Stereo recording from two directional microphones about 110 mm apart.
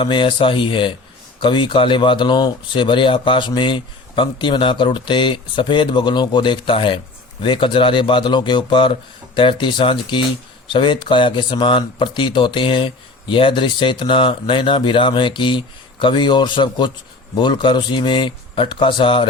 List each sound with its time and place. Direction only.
0.0 s speech: 50° left (ahead or behind)